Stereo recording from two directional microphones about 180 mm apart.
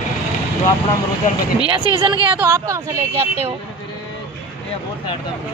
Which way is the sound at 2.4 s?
15° right (ahead or behind).